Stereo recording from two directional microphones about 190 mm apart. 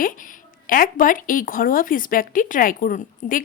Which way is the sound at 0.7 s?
45° left (ahead or behind).